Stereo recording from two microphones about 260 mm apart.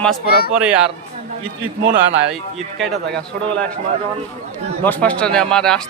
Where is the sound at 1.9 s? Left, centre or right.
Right.